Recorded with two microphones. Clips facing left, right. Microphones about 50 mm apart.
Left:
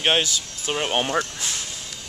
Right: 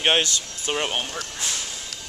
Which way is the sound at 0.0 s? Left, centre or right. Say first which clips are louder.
Even; centre.